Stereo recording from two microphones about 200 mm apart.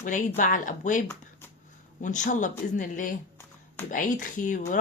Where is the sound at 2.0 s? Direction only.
40° left (ahead or behind).